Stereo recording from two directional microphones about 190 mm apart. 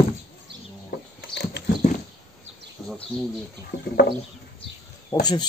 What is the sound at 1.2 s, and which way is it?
Dog, 60° left (ahead or behind).